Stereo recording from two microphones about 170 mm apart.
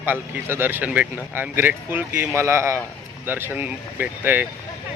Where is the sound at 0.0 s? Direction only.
10° right (ahead or behind).